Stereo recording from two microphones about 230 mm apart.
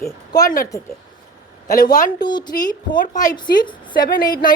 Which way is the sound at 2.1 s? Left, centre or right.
Centre.